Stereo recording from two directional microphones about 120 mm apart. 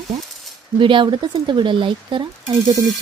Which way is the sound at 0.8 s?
45° right (ahead or behind).